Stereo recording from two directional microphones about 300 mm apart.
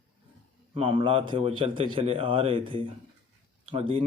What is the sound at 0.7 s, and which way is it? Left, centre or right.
Speech, centre.